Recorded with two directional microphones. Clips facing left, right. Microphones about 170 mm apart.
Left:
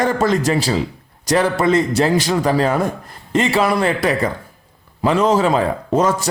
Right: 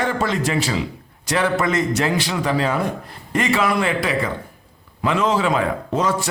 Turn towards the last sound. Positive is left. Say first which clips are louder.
# left 4 dB
turn(degrees=45)  # may be behind; listen again after turning